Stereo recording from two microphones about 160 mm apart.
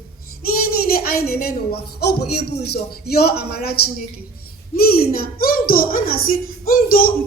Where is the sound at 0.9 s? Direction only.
70° left (ahead or behind).